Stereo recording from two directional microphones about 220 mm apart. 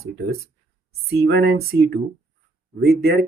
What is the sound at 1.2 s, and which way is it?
Speech, 50° right (ahead or behind).